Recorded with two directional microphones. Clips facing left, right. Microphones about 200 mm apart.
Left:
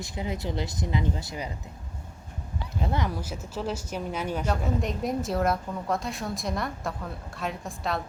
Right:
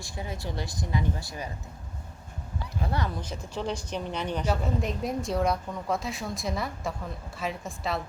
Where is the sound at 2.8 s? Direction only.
20° left (ahead or behind).